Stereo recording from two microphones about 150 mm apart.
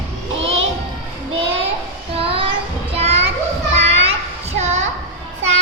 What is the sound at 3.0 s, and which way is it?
Children playing, 45° right (ahead or behind).